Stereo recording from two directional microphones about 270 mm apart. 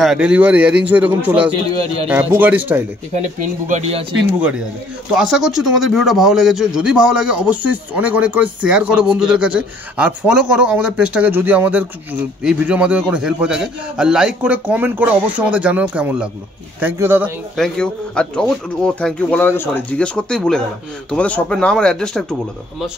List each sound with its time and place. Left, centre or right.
0.0 s speech: centre
3.2 s speech: right
5.1 s speech: centre
17.6 s speech: centre